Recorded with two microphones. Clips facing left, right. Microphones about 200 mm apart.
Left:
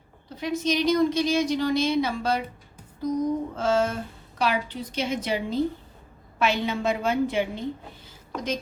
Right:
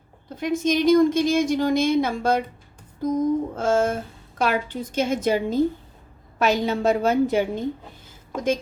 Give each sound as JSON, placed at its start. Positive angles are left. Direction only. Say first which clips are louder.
{"t": 0.3, "sound": "a woman's voice", "louder": "right 4 dB", "side_deg": -50}